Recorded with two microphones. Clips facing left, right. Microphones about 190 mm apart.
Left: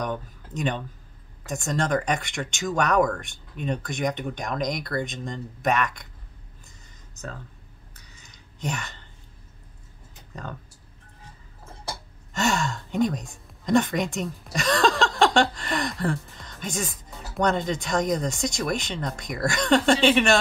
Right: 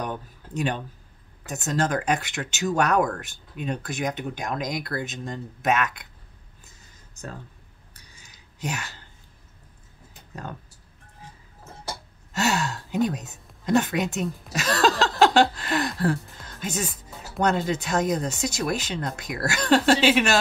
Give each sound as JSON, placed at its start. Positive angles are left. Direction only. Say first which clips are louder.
{"t": 0.0, "sound": "speech", "louder": "left 2 dB", "side_deg": -10}
{"t": 7.2, "sound": "speech", "louder": "left 1 dB", "side_deg": -10}
{"t": 8.1, "sound": "a sound", "louder": "left 2 dB", "side_deg": -5}
{"t": 12.3, "sound": "speech", "louder": "even", "side_deg": -5}